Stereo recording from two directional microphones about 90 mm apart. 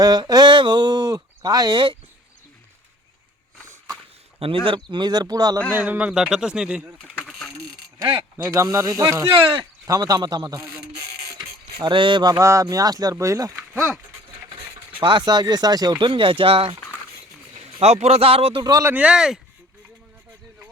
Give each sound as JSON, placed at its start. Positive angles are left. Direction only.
{"t": 0.0, "sound": "a sound", "side_deg": -45}
{"t": 1.7, "sound": "speech", "side_deg": -65}
{"t": 4.4, "sound": "speech", "side_deg": -85}
{"t": 5.7, "sound": "speech", "side_deg": -20}
{"t": 7.3, "sound": "a sound", "side_deg": 0}
{"t": 8.4, "sound": "speech", "side_deg": -35}
{"t": 11.3, "sound": "a sound", "side_deg": -60}
{"t": 12.2, "sound": "speech", "side_deg": -40}
{"t": 15.0, "sound": "speech", "side_deg": -55}
{"t": 17.7, "sound": "speech", "side_deg": -90}
{"t": 18.6, "sound": "speech", "side_deg": -45}
{"t": 18.9, "sound": "speech", "side_deg": -15}